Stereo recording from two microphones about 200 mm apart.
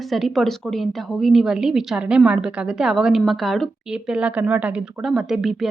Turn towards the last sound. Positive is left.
turn(degrees=0)  # may be behind; listen again after turning